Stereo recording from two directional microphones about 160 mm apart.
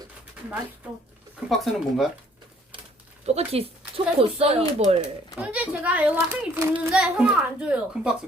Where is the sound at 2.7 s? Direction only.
30° right (ahead or behind).